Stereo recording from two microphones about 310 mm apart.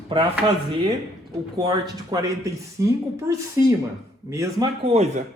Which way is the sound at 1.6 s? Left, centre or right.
Centre.